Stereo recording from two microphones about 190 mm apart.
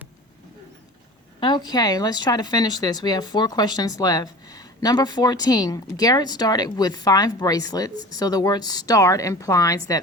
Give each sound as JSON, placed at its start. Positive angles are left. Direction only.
{"t": 1.4, "sound": "speech", "side_deg": 25}